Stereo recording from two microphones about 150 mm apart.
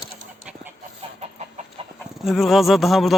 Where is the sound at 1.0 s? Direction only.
45° right (ahead or behind).